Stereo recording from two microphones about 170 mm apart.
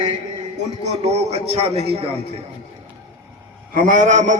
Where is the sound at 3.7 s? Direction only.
50° right (ahead or behind).